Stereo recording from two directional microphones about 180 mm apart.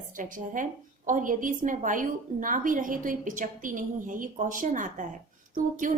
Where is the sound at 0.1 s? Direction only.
45° right (ahead or behind).